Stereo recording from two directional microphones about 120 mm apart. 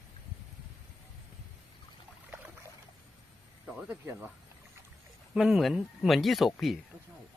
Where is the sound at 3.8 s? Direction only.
20° right (ahead or behind).